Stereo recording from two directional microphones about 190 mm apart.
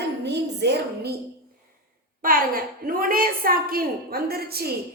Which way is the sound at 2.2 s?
50° right (ahead or behind).